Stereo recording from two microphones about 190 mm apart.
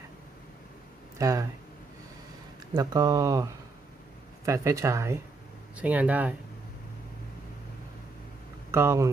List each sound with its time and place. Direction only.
1.2 s speech: 15° right (ahead or behind)
2.7 s speech: 20° right (ahead or behind)
8.7 s speech: 15° right (ahead or behind)